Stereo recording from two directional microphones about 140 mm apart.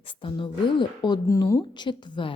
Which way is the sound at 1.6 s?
35° left (ahead or behind).